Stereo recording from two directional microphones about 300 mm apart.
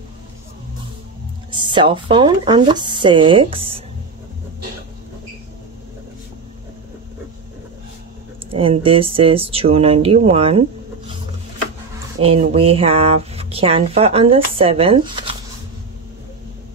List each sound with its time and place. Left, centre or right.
1.5 s speech: centre
8.5 s speech: centre
12.2 s speech: centre